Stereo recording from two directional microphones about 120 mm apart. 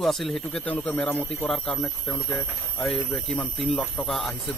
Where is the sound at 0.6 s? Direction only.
10° left (ahead or behind).